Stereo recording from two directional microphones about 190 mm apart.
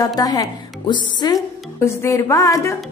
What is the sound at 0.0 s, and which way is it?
A woman's voice, 20° left (ahead or behind).